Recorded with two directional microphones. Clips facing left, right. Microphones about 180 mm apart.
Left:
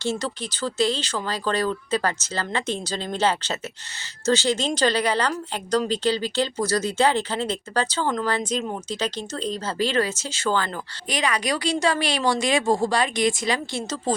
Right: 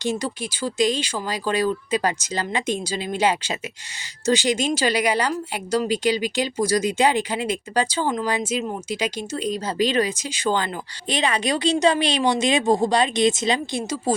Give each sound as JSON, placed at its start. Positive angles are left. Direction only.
{"t": 0.0, "sound": "a woman's voice", "side_deg": -15}